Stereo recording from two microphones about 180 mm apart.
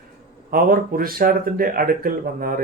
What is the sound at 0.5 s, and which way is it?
A man's voice, 55° right (ahead or behind).